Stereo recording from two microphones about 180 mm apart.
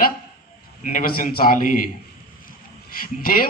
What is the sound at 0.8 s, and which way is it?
Speech, 50° left (ahead or behind).